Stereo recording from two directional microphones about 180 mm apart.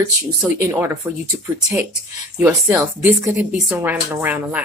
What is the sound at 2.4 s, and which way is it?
Speech, 15° right (ahead or behind).